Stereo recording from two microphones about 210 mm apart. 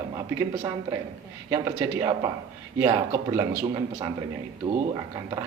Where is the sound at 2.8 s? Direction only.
20° right (ahead or behind).